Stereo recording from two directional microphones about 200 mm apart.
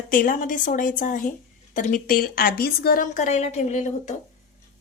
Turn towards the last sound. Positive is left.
turn(degrees=35)  # may be behind; listen again after turning